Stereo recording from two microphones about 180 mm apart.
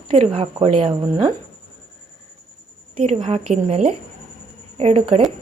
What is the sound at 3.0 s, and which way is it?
Speech, 35° right (ahead or behind).